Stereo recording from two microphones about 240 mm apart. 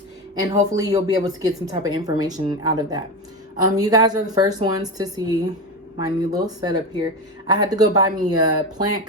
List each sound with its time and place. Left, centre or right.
0.3 s speech: centre